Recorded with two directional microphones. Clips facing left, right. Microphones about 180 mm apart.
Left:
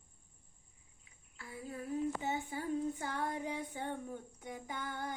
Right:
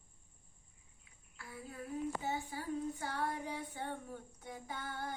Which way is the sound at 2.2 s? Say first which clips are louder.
Left 2 dB; 20° left (ahead or behind).